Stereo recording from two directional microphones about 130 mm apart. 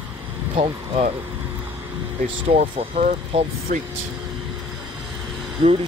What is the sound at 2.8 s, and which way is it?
Speech, 50° right (ahead or behind).